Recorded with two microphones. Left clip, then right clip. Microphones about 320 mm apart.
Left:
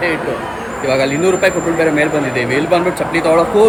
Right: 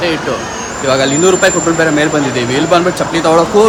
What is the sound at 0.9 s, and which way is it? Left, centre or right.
Speech, centre.